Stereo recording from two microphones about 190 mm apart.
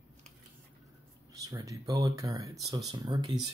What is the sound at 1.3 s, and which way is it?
Speech, 20° right (ahead or behind).